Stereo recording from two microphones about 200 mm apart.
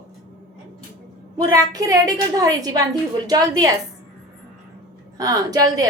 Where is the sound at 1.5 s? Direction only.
15° right (ahead or behind).